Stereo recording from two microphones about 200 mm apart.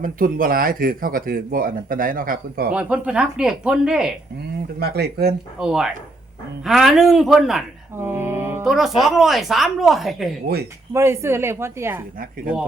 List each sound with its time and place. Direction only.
0.0 s speech: 45° right (ahead or behind)
2.7 s a woman's voice: 5° right (ahead or behind)
4.8 s speech: 50° right (ahead or behind)
5.5 s a woman's voice: 5° right (ahead or behind)
8.0 s music: 10° right (ahead or behind)
9.0 s a woman's voice: centre (ahead or behind)
10.9 s a woman's voice: 15° right (ahead or behind)